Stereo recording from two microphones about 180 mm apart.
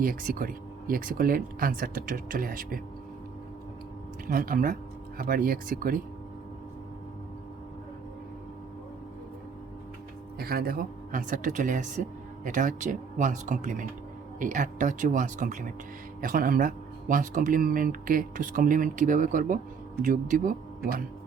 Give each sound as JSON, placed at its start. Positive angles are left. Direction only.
{"t": 0.0, "sound": "speech", "side_deg": -55}
{"t": 4.3, "sound": "speech", "side_deg": -50}
{"t": 10.3, "sound": "speech", "side_deg": -55}